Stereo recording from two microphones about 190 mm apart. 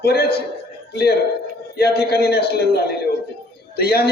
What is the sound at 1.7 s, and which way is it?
A man's voice, 55° left (ahead or behind).